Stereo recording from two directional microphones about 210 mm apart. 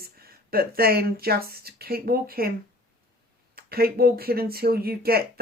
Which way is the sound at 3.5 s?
45° right (ahead or behind).